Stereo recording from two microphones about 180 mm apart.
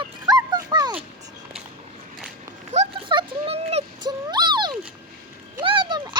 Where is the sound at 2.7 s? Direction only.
35° right (ahead or behind).